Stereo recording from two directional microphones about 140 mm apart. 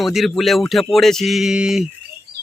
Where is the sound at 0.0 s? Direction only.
Centre (ahead or behind).